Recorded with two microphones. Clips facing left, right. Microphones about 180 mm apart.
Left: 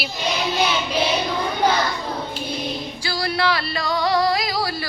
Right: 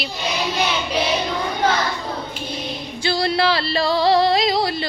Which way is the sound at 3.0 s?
25° right (ahead or behind).